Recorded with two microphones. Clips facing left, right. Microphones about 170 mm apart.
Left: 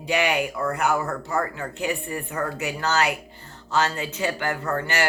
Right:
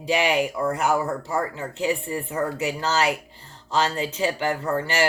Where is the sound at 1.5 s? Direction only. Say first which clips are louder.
Right 2 dB; 30° right (ahead or behind).